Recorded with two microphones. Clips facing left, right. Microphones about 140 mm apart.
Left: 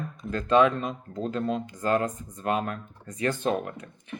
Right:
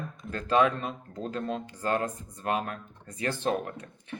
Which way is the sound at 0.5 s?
35° left (ahead or behind).